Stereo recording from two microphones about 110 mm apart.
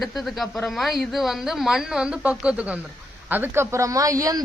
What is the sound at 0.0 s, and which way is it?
A woman's voice, centre (ahead or behind).